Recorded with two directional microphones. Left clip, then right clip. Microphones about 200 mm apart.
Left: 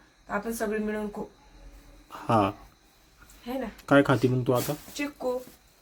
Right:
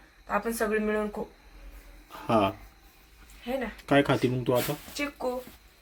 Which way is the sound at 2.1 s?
10° left (ahead or behind).